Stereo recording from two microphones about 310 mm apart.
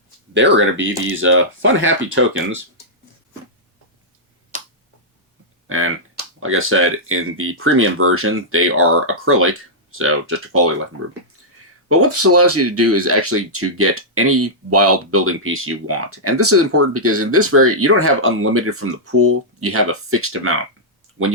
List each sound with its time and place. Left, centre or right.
0.3 s speech: right
5.6 s speech: right